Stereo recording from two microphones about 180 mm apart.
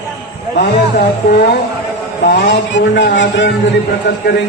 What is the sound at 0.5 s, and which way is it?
Speech, 55° left (ahead or behind).